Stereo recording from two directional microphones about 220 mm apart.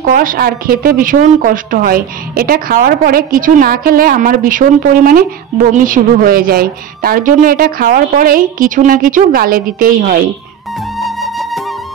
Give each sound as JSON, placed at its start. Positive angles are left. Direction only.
{"t": 0.1, "sound": "a woman's voice", "side_deg": -40}
{"t": 11.0, "sound": "music", "side_deg": 0}